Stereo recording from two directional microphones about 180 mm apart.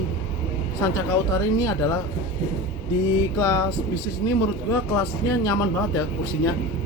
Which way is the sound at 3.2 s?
15° left (ahead or behind).